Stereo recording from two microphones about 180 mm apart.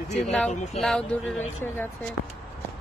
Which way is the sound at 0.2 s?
Centre (ahead or behind).